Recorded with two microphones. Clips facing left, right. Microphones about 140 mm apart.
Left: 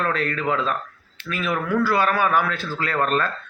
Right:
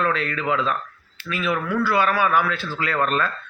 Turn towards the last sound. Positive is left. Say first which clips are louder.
# even
turn(degrees=40)  # may be behind; listen again after turning